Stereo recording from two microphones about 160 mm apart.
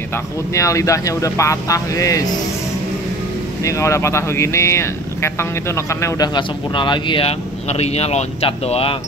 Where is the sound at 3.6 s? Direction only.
20° left (ahead or behind); by 8.9 s 35° left (ahead or behind).